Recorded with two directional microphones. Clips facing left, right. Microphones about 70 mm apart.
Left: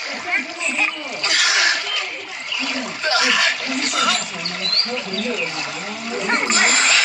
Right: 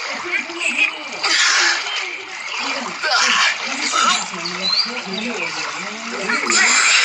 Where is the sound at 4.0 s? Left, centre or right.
Left.